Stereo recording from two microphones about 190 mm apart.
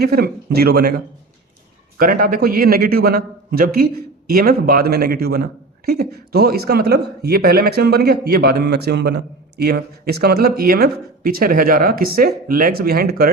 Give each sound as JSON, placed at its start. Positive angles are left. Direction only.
{"t": 0.0, "sound": "a man's voice", "side_deg": -55}